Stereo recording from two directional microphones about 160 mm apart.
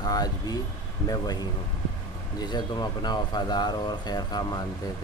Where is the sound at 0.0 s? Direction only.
25° left (ahead or behind).